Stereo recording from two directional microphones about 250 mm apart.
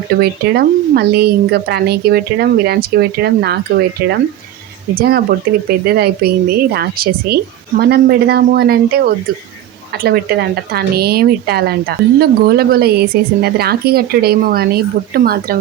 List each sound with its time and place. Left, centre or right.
0.2 s speech: right